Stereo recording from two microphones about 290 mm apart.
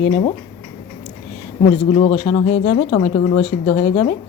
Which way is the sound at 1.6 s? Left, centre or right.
Left.